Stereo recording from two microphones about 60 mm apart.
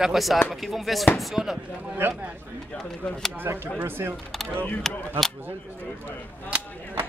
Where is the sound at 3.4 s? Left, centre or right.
Right.